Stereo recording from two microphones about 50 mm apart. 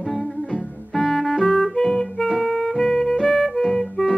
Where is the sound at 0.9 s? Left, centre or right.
Centre.